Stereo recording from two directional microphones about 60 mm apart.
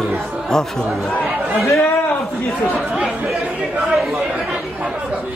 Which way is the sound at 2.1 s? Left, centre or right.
Left.